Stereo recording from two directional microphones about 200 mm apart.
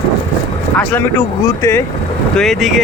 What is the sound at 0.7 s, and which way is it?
Speech, 10° left (ahead or behind).